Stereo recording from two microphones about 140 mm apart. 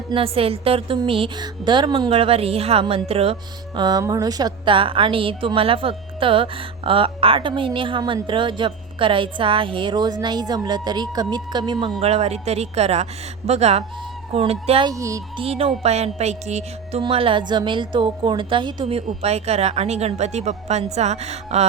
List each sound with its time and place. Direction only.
0.1 s a woman's voice: 40° right (ahead or behind)
3.8 s a woman's voice: 30° right (ahead or behind)
11.9 s a woman's voice: 50° right (ahead or behind)
14.8 s speech: 25° right (ahead or behind)
15.4 s a woman's voice: 45° right (ahead or behind)
17.0 s a woman's voice: 40° right (ahead or behind)